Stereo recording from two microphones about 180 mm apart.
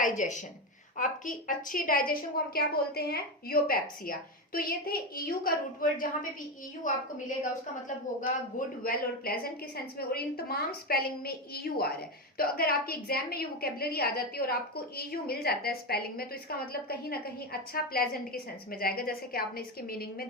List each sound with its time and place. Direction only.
0.0 s a woman's voice: 45° left (ahead or behind)
8.2 s a woman's voice: 50° left (ahead or behind)